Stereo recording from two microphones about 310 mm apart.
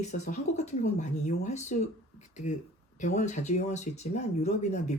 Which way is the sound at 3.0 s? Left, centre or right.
Left.